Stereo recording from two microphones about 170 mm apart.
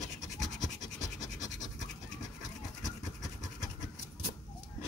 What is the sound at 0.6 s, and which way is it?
Scratch, 20° left (ahead or behind).